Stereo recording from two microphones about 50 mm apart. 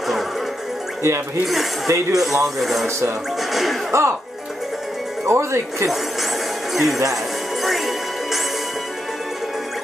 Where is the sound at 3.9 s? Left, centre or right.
Right.